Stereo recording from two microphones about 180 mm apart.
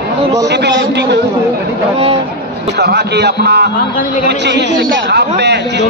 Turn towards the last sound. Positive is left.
turn(degrees=-70)  # may be behind; listen again after turning